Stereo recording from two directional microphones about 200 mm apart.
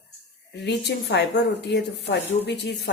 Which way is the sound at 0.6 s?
55° left (ahead or behind).